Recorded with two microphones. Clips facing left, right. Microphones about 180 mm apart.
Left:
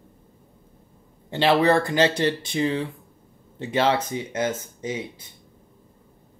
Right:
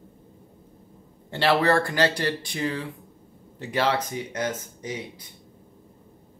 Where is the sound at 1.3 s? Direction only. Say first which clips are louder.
Left 2 dB; 20° left (ahead or behind).